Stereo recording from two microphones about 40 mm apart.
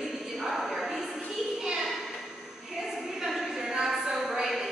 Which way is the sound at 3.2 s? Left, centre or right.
Centre.